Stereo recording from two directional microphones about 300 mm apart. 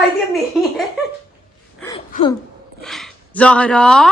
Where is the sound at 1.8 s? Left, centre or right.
Centre.